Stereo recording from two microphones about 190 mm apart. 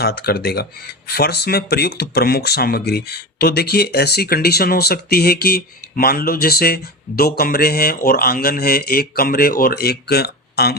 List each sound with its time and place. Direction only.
0.0 s speech: 55° left (ahead or behind)